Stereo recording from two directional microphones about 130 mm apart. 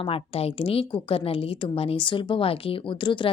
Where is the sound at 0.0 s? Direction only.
50° left (ahead or behind).